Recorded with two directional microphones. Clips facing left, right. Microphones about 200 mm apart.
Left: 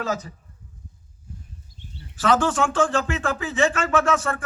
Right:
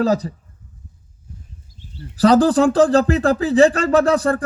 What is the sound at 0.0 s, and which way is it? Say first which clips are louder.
Speech: right 10 dB; 35° right (ahead or behind).